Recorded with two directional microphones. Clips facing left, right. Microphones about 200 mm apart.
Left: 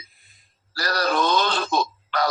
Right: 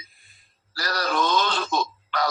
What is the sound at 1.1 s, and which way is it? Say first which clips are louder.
Speech: left 1 dB; 35° left (ahead or behind).